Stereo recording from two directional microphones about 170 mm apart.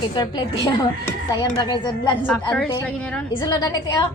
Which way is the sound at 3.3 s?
25° left (ahead or behind).